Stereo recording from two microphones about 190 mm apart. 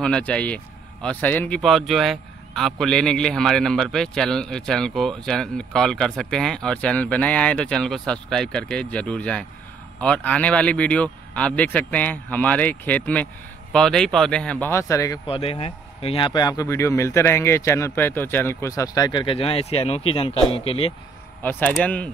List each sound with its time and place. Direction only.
0.0 s a man's voice: 5° left (ahead or behind)
15.2 s speech: 30° left (ahead or behind)
21.4 s speech: 10° left (ahead or behind)